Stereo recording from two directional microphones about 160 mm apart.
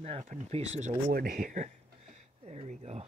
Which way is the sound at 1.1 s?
70° right (ahead or behind).